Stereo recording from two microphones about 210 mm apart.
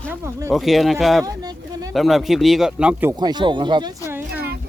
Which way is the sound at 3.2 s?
20° right (ahead or behind).